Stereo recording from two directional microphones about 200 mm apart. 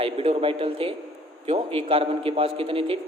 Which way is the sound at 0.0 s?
30° right (ahead or behind).